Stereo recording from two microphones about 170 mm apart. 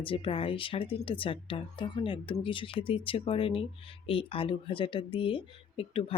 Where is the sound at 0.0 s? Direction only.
30° left (ahead or behind).